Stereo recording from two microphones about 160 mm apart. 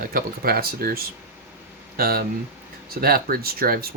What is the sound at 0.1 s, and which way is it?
Speech, 65° right (ahead or behind).